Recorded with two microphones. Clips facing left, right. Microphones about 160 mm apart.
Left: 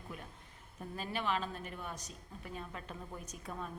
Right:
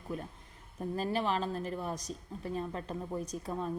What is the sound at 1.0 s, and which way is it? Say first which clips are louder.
A woman's voice: right 4 dB; 35° right (ahead or behind).